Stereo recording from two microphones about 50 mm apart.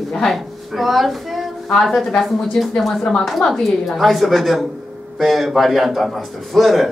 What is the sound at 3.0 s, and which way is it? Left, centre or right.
A woman's voice, centre.